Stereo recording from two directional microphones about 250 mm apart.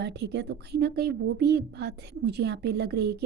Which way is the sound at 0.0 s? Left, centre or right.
Right.